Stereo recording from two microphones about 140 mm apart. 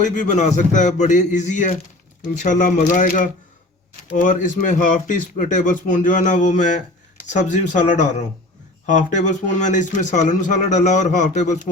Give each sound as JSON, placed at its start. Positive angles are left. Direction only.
{"t": 0.2, "sound": "speech", "side_deg": 60}